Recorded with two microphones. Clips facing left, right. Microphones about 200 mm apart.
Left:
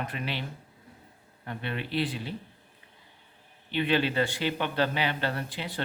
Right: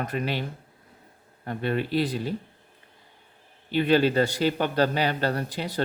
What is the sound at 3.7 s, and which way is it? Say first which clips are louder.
Speech: right 6 dB; 40° right (ahead or behind).